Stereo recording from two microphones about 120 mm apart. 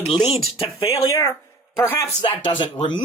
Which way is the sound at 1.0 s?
30° left (ahead or behind).